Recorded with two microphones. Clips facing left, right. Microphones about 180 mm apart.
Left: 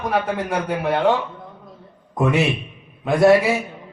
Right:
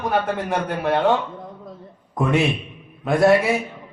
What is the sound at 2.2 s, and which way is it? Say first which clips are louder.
Speech: left 1 dB; centre (ahead or behind).